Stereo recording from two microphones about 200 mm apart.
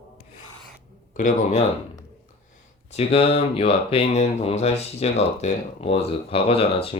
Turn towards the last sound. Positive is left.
turn(degrees=30)  # may be behind; listen again after turning